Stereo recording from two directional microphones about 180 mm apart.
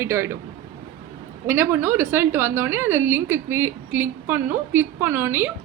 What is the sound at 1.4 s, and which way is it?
A woman's voice, 10° right (ahead or behind).